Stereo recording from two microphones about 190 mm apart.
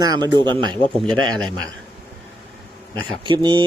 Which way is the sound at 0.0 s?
20° right (ahead or behind).